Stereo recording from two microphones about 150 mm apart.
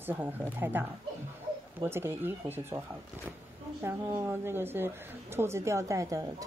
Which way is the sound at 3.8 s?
15° right (ahead or behind).